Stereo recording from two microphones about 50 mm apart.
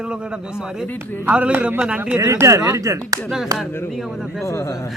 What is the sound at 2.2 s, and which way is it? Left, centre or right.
Speech, right.